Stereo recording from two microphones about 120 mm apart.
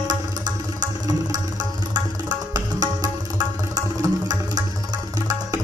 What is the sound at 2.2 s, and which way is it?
Music, 30° right (ahead or behind).